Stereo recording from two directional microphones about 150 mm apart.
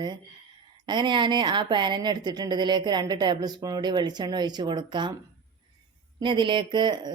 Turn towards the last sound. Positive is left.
turn(degrees=-30)  # may be behind; listen again after turning